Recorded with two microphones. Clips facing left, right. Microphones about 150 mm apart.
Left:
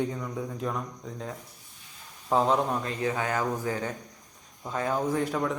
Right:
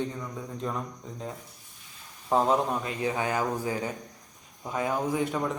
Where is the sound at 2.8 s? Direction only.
20° right (ahead or behind).